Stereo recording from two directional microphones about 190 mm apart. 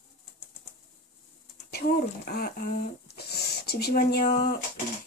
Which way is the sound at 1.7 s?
55° left (ahead or behind).